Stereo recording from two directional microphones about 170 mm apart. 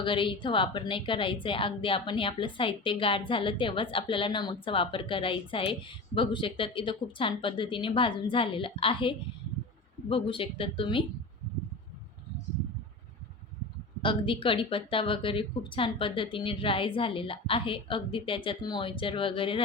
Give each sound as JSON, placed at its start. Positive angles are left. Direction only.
{"t": 0.0, "sound": "a woman's voice", "side_deg": 30}
{"t": 14.0, "sound": "a woman's voice", "side_deg": 30}